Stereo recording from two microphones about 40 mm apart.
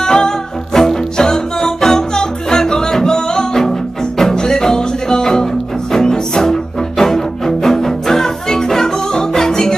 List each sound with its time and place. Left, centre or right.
0.0 s music: centre